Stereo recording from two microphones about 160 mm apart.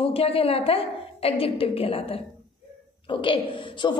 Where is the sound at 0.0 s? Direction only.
35° left (ahead or behind).